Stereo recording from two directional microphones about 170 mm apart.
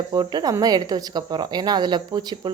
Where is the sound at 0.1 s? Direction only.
25° right (ahead or behind).